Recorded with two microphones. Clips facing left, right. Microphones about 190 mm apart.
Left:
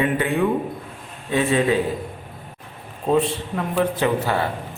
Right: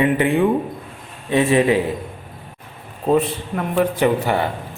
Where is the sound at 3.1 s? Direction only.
15° right (ahead or behind).